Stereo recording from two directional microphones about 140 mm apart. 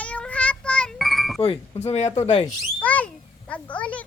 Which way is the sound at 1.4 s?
45° left (ahead or behind).